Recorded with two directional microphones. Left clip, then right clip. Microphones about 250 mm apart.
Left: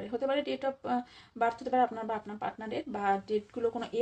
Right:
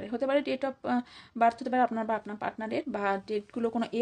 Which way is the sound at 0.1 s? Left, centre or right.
Right.